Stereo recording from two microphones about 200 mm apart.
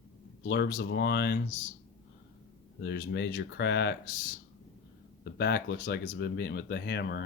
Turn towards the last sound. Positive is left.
turn(degrees=55)  # may be behind; listen again after turning